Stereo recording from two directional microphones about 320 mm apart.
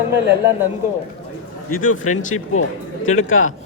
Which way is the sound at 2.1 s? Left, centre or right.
Left.